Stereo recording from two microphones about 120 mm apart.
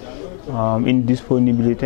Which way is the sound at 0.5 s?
15° left (ahead or behind).